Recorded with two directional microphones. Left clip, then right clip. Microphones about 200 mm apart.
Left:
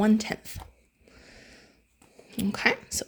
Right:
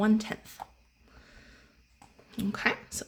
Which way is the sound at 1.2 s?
30° left (ahead or behind).